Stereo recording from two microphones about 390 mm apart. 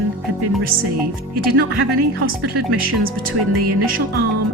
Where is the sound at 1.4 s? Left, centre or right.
Right.